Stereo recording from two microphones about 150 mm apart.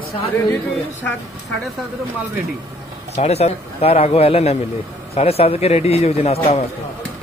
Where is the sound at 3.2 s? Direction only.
45° left (ahead or behind).